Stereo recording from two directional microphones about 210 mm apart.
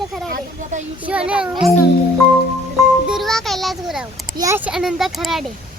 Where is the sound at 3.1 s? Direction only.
Centre (ahead or behind).